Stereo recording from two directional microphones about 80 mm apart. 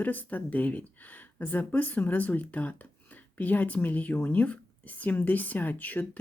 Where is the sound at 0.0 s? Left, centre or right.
Left.